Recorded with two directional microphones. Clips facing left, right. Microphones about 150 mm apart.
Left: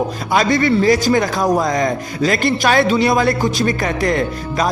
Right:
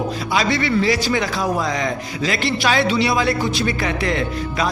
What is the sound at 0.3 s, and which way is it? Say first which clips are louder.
A man's voice: left 5 dB; 45° left (ahead or behind).